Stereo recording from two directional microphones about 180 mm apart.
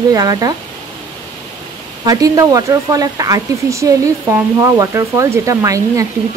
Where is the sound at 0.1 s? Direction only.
20° right (ahead or behind).